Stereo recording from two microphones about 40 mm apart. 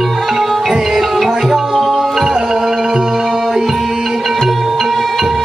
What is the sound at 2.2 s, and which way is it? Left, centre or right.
Music, centre.